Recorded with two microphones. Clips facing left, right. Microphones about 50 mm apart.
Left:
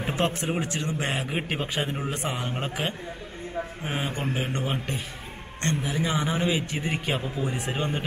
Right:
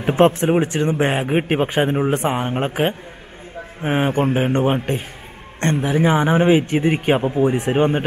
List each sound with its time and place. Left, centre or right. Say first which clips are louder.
0.0 s a man's voice: right 12 dB; right